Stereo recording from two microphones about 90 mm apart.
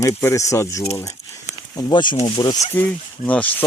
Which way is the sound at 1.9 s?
55° left (ahead or behind).